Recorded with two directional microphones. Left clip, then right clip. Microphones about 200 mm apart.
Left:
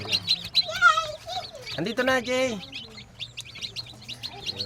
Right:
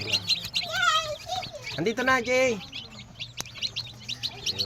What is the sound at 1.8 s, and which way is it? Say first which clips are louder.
Speech: even; 15° left (ahead or behind).